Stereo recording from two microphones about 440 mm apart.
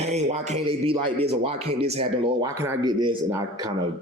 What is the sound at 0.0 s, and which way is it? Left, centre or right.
Speech, centre.